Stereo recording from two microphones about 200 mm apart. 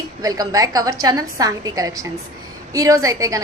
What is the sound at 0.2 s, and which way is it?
A woman's voice, 20° right (ahead or behind).